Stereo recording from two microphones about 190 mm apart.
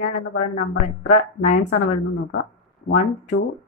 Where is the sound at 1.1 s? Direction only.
40° left (ahead or behind).